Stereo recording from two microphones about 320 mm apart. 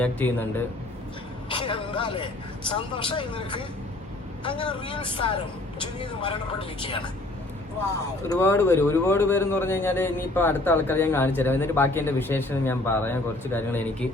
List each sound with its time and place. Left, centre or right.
0.0 s a man's voice: centre
1.5 s a sound: centre
2.6 s speech: centre
8.3 s speech: centre